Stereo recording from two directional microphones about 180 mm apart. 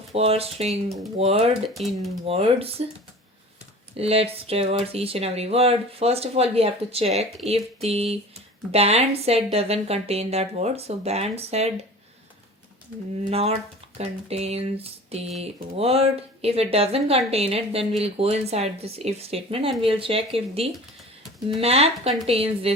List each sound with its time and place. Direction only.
0.1 s speech: 35° right (ahead or behind)
1.7 s speech: centre (ahead or behind)
2.2 s speech: 30° right (ahead or behind)
3.9 s speech: 35° right (ahead or behind)
14.0 s speech: 35° right (ahead or behind)